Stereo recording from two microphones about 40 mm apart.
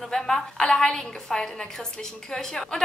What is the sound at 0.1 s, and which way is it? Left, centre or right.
A woman's voice, centre.